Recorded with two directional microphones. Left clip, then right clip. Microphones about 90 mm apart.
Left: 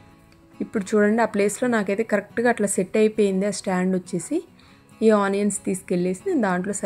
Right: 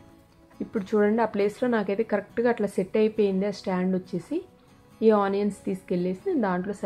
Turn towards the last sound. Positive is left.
turn(degrees=35)  # may be behind; listen again after turning